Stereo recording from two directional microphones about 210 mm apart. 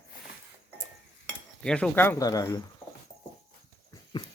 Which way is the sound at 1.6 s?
5° left (ahead or behind).